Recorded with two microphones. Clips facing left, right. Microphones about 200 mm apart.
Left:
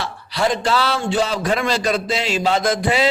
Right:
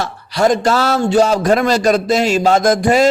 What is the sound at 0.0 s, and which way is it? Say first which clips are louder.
A man's voice: right 6 dB; 45° right (ahead or behind).